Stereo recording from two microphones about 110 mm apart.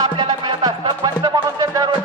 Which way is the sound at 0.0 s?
40° right (ahead or behind).